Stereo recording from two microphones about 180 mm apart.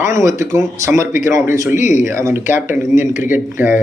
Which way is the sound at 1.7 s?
45° left (ahead or behind).